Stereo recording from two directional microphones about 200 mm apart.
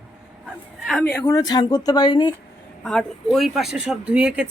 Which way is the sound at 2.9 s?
Centre (ahead or behind).